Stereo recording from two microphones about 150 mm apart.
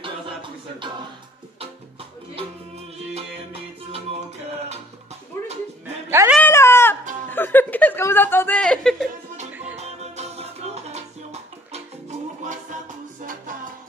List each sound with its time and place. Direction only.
0.0 s a sound: 35° right (ahead or behind)
1.6 s music: 40° right (ahead or behind)
6.0 s cat: 15° right (ahead or behind)
6.4 s a sound: 15° left (ahead or behind)
9.5 s music: 10° right (ahead or behind)
9.8 s music: 45° right (ahead or behind)